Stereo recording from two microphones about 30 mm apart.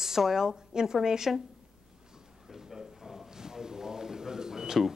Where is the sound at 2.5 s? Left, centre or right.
Centre.